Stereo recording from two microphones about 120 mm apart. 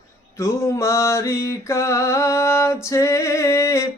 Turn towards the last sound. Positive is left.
turn(degrees=25)  # may be behind; listen again after turning